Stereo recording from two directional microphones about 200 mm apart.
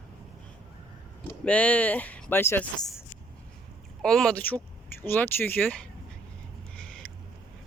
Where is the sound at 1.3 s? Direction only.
5° left (ahead or behind).